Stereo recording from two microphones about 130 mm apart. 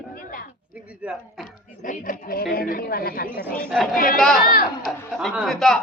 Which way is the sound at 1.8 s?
90° left.